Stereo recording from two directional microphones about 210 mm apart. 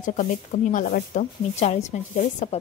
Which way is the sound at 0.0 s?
40° left (ahead or behind).